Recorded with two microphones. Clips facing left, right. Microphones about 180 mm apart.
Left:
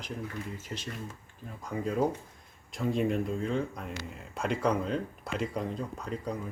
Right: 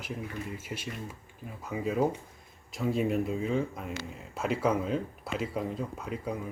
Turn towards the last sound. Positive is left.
turn(degrees=-5)  # may be behind; listen again after turning